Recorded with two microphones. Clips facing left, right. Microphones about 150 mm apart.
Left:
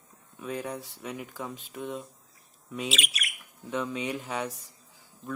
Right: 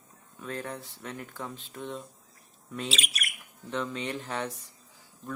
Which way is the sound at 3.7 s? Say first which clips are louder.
Left 2 dB; 10° left (ahead or behind).